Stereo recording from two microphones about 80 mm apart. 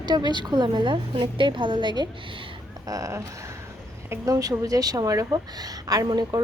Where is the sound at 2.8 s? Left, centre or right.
Right.